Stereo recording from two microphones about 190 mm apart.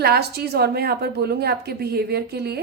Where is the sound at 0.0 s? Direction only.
55° right (ahead or behind).